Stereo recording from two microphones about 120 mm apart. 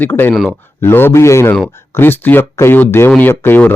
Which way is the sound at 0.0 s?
15° left (ahead or behind).